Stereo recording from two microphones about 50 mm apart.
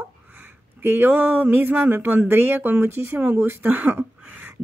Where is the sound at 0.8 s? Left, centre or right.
Right.